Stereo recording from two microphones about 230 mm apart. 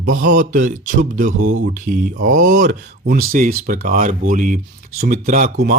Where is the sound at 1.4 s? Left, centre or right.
Right.